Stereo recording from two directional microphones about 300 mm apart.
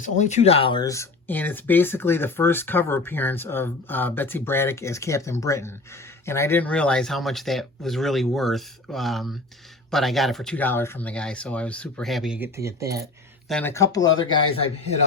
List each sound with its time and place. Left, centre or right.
0.0 s speech: left; by 13.1 s centre
13.5 s speech: centre